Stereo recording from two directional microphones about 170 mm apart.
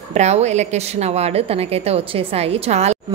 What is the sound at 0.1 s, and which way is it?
A woman's voice, 40° right (ahead or behind).